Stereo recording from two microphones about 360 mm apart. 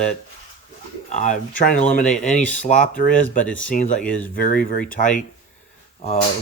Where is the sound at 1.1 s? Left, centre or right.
Centre.